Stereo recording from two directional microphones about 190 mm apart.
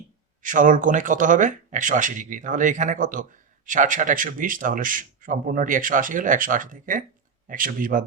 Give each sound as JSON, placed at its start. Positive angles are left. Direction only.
{"t": 0.4, "sound": "a man's voice", "side_deg": -45}